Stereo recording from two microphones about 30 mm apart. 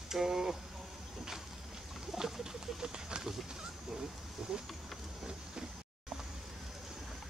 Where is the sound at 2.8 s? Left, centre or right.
Right.